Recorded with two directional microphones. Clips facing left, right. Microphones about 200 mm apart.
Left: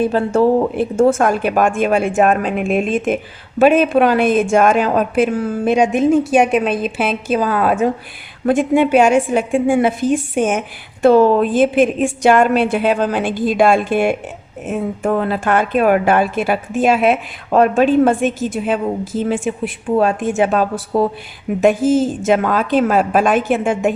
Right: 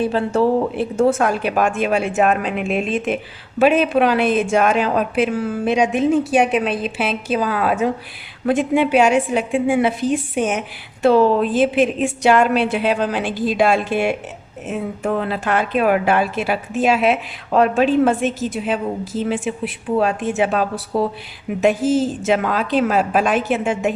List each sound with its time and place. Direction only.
0.0 s speech: 45° left (ahead or behind)